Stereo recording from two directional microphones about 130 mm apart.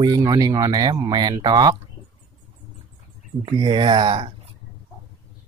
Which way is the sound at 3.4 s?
35° right (ahead or behind).